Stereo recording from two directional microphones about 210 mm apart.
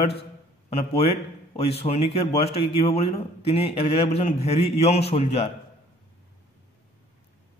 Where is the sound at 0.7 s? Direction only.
30° left (ahead or behind).